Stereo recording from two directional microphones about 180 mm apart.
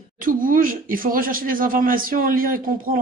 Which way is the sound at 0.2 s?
50° right (ahead or behind).